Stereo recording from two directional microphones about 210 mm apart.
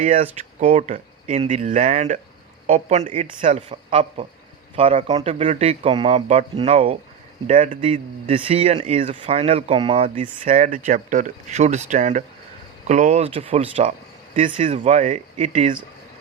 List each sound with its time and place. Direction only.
0.2 s speech: 30° right (ahead or behind)
3.7 s speech: 25° right (ahead or behind)
7.8 s speech: 25° right (ahead or behind)
10.4 s speech: 40° right (ahead or behind)